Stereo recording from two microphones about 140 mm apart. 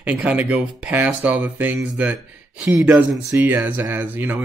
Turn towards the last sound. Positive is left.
turn(degrees=-15)  # may be behind; listen again after turning